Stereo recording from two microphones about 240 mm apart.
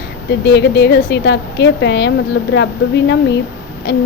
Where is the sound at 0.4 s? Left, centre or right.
Left.